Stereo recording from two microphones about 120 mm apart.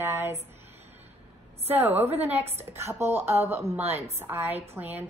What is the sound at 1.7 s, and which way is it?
A woman's voice, 15° right (ahead or behind).